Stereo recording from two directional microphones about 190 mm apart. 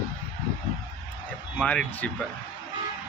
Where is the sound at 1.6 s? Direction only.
5° left (ahead or behind).